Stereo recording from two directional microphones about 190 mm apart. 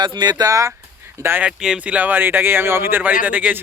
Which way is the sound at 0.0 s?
25° right (ahead or behind).